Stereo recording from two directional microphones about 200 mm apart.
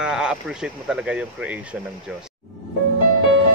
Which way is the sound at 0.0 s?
5° right (ahead or behind).